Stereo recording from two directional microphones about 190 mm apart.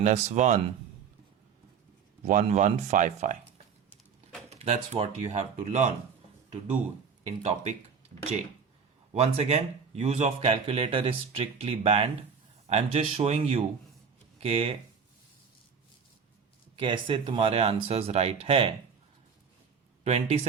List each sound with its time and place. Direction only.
0.0 s speech: 40° right (ahead or behind)
2.2 s speech: 40° right (ahead or behind)
4.4 s speech: 35° right (ahead or behind)
7.4 s speech: 35° right (ahead or behind)
9.1 s speech: 35° right (ahead or behind)
16.7 s speech: 25° right (ahead or behind)
20.1 s speech: 35° right (ahead or behind)